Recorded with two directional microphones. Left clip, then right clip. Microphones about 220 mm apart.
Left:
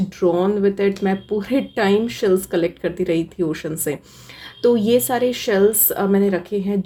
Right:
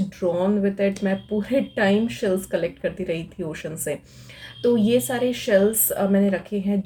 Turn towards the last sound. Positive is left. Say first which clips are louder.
# left 4 dB
turn(degrees=35)  # may be behind; listen again after turning